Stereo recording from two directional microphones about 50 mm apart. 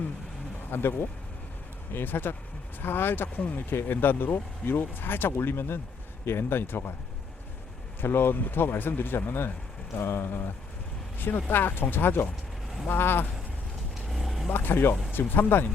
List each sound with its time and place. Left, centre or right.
0.7 s speech: left
8.0 s speech: left
11.2 s speech: left
14.1 s vehicle: centre
14.5 s speech: left